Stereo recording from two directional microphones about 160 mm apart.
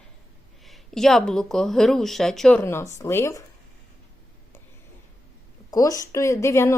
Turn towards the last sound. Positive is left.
turn(degrees=15)  # may be behind; listen again after turning